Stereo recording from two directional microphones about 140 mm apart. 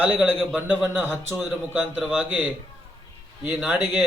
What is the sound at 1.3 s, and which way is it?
A man's voice, centre (ahead or behind).